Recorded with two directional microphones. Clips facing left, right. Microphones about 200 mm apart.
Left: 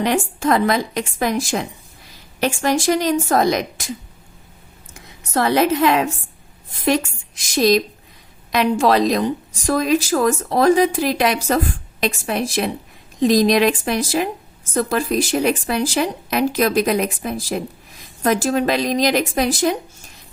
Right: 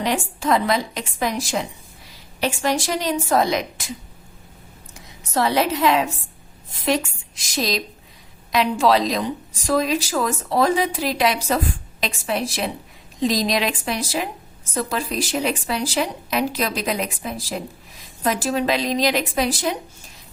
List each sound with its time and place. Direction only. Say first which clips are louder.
0.0 s speech: left 4 dB; 55° left (ahead or behind)
5.3 s speech: left 3 dB; 55° left (ahead or behind)